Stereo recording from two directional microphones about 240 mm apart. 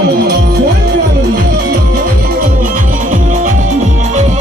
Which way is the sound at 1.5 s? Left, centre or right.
Right.